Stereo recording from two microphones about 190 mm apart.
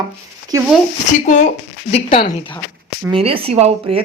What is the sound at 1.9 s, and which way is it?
Speech, 30° left (ahead or behind).